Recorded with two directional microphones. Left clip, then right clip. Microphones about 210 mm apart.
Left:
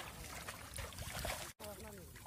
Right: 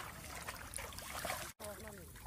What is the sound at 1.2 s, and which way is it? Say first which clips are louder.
Boat: right 2 dB; 5° right (ahead or behind).